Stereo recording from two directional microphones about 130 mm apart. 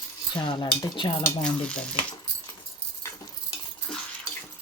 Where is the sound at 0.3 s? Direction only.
35° left (ahead or behind).